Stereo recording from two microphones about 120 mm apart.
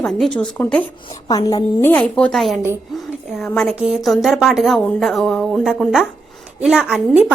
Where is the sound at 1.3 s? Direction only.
35° left (ahead or behind).